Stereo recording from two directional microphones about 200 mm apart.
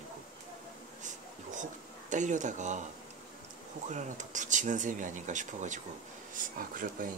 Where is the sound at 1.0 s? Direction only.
40° right (ahead or behind).